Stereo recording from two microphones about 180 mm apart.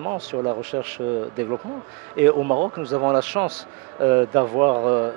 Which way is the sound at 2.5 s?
30° right (ahead or behind).